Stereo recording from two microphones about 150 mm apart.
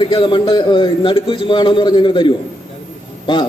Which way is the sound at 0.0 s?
30° left (ahead or behind).